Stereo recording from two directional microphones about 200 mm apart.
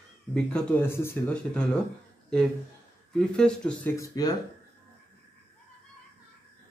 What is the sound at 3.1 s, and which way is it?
A man's voice, 5° left (ahead or behind).